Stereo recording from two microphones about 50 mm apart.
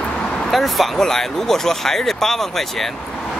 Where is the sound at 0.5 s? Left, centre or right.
Centre.